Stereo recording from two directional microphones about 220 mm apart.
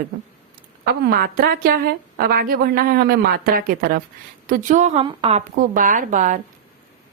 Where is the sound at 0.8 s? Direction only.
45° right (ahead or behind).